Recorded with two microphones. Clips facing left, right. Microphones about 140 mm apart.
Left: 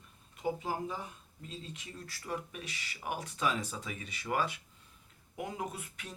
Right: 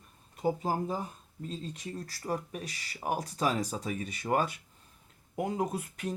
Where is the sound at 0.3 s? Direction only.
40° right (ahead or behind).